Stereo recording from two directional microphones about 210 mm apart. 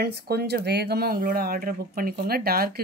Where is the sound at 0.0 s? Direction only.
50° right (ahead or behind).